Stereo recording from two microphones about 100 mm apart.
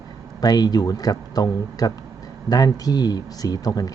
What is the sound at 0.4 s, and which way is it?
Speech, 40° left (ahead or behind).